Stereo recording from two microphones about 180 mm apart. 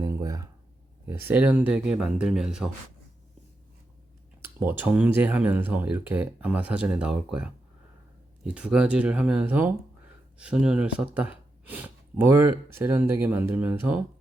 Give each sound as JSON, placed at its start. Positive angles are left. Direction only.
{"t": 0.0, "sound": "a sound", "side_deg": -15}
{"t": 1.0, "sound": "speech", "side_deg": -10}
{"t": 4.4, "sound": "speech", "side_deg": -10}